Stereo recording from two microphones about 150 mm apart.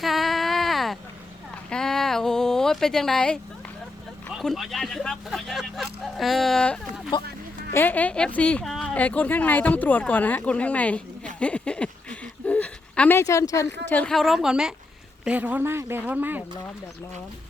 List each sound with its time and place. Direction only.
0.0 s a sound: centre (ahead or behind)
4.3 s speech: centre (ahead or behind)
7.1 s speech: 30° left (ahead or behind)
7.7 s a woman's voice: 15° left (ahead or behind); by 16.4 s 10° right (ahead or behind)